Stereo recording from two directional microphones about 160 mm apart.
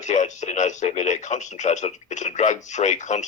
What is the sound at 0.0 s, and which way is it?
Speech, 50° left (ahead or behind).